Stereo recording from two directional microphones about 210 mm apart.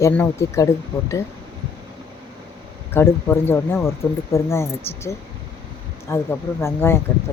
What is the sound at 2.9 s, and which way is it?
Speech, 10° left (ahead or behind).